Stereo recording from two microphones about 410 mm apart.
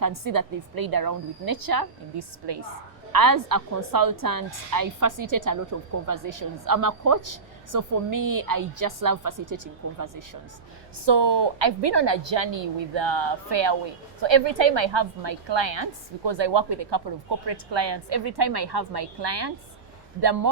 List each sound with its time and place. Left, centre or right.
0.0 s a woman's voice: right
3.1 s a woman's voice: right
11.0 s a woman's voice: right